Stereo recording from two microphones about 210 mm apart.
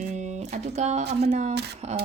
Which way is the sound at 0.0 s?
35° right (ahead or behind).